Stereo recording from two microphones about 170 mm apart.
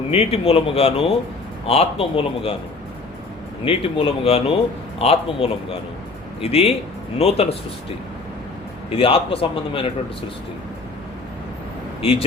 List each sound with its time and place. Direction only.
0.1 s a man's voice: 35° left (ahead or behind)
3.6 s a man's voice: 30° left (ahead or behind)
8.9 s a man's voice: 35° left (ahead or behind)